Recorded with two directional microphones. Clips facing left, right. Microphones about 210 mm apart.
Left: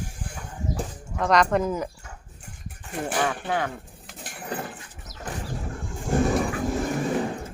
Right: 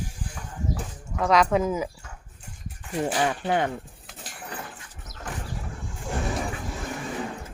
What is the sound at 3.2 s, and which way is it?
Speech, 20° right (ahead or behind).